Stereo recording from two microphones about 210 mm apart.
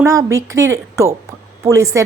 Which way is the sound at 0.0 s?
15° right (ahead or behind).